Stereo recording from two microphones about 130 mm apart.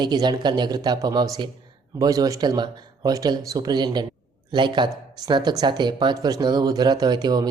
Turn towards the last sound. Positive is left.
turn(degrees=-30)  # may be behind; listen again after turning